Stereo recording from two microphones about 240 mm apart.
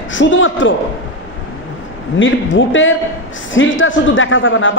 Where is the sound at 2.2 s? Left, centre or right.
Left.